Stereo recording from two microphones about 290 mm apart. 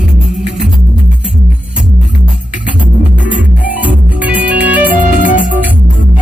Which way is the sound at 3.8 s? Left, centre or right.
Centre.